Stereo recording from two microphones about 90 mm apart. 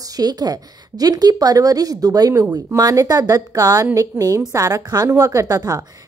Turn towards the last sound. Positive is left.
turn(degrees=-45)  # may be behind; listen again after turning